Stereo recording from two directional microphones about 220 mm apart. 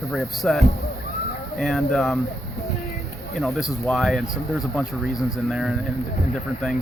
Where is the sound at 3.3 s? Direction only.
Centre (ahead or behind).